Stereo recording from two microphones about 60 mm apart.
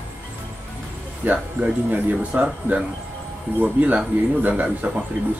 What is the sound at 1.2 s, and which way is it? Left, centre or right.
Speech, right.